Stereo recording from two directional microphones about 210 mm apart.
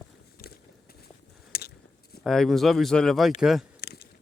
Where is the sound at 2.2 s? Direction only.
Centre (ahead or behind).